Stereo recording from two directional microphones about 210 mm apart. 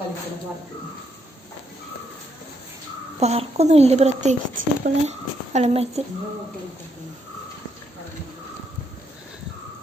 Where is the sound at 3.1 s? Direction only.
30° right (ahead or behind).